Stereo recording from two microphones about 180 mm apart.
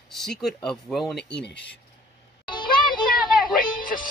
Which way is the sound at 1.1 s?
70° left (ahead or behind).